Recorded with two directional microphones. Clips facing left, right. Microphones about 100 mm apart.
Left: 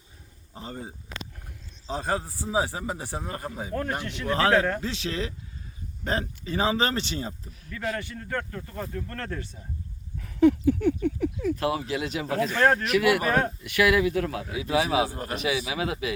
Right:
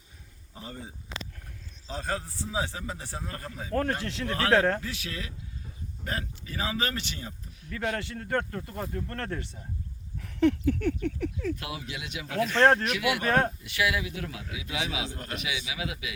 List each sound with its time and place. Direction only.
0.5 s speech: 30° left (ahead or behind)
4.5 s speech: 30° right (ahead or behind)
4.8 s speech: 25° left (ahead or behind)
7.7 s speech: 35° right (ahead or behind)
10.2 s dog: 5° left (ahead or behind)
11.5 s speech: 40° left (ahead or behind)
12.6 s speech: 30° right (ahead or behind)
12.9 s a man's voice: 45° left (ahead or behind)
13.7 s a man's voice: 55° left (ahead or behind)
15.2 s speech: 35° left (ahead or behind)